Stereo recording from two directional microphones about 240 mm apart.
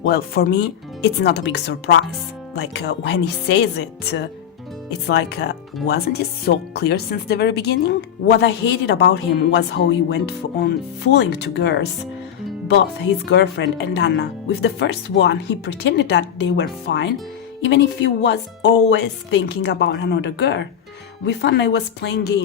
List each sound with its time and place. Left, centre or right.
0.0 s speech: left